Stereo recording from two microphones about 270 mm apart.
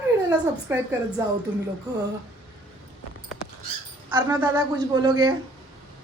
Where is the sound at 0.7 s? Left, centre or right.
Centre.